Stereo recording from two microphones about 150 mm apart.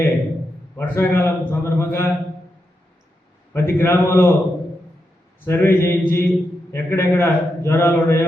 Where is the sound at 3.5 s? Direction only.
15° left (ahead or behind).